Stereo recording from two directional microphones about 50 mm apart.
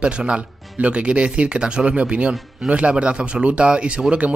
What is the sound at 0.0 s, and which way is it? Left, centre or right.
Speech, right.